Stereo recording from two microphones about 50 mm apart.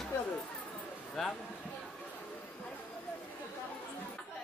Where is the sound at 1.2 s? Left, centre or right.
Centre.